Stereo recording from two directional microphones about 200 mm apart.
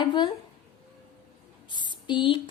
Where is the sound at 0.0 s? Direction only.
25° left (ahead or behind).